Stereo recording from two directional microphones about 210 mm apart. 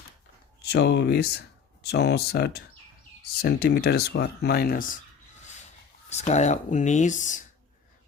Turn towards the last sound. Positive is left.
turn(degrees=35)  # may be behind; listen again after turning